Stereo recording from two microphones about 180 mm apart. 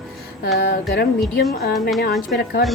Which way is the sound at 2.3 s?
60° left (ahead or behind).